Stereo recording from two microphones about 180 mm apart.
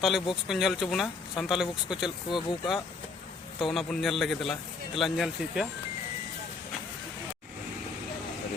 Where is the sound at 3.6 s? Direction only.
Centre (ahead or behind).